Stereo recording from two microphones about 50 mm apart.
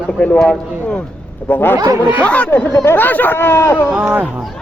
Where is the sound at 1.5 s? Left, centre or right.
Left.